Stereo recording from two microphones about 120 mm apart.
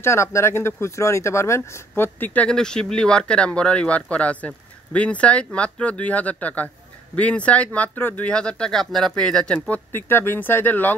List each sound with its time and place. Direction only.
0.0 s speech: 25° left (ahead or behind); by 9.8 s 5° left (ahead or behind)
9.9 s speech: 20° left (ahead or behind)